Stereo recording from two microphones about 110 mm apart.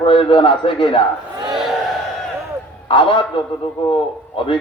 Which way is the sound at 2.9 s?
45° left (ahead or behind).